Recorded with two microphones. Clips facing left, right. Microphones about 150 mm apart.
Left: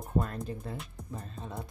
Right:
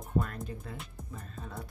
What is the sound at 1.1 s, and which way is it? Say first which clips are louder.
Speech: left 3 dB; 25° left (ahead or behind).